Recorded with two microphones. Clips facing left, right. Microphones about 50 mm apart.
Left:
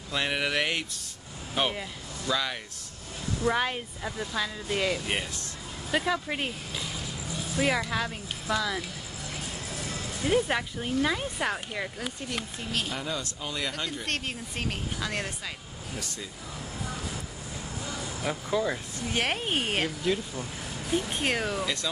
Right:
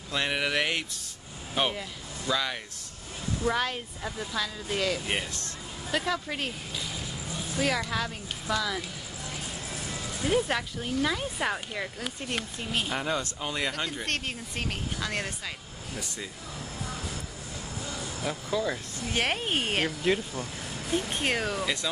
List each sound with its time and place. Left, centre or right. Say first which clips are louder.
0.1 s speech: even; centre
3.4 s speech: left 2 dB; centre
10.2 s speech: left 1 dB; centre
11.3 s speech: even; centre
12.9 s speech: right 3 dB; right
13.4 s speech: right 2 dB; right
13.7 s speech: right 1 dB; centre
14.0 s speech: even; centre
17.8 s a sound: left 1 dB; centre
18.9 s speech: right 1 dB; centre